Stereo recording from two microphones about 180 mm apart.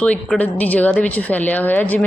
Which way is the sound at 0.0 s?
5° left (ahead or behind).